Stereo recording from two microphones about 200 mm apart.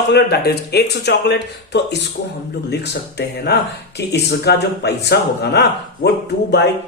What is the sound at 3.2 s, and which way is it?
Speech, 55° left (ahead or behind).